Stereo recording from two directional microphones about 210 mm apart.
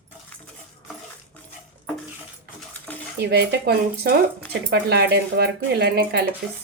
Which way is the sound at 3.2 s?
50° right (ahead or behind).